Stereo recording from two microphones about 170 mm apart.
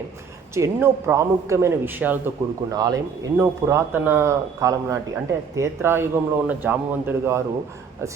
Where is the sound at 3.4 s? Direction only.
15° right (ahead or behind).